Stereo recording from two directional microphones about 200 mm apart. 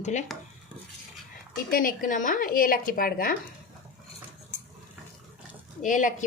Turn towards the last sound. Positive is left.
turn(degrees=40)  # may be behind; listen again after turning